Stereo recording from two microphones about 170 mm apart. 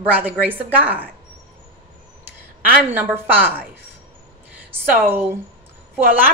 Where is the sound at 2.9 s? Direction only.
10° right (ahead or behind).